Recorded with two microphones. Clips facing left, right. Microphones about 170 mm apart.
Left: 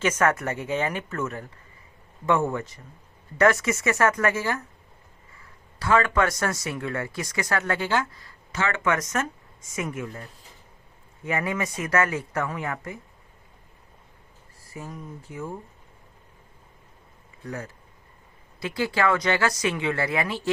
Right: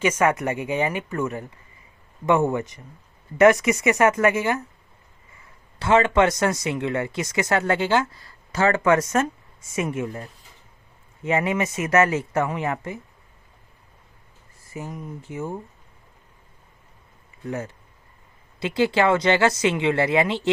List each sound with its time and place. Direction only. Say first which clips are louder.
0.0 s speech: right 2 dB; 10° right (ahead or behind)
5.8 s speech: right 4 dB; 25° right (ahead or behind)
14.6 s speech: right 4 dB; 25° right (ahead or behind)
17.4 s speech: right 5 dB; 25° right (ahead or behind)